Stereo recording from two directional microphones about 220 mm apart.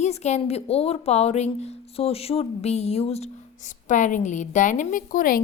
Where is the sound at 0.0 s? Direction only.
30° left (ahead or behind).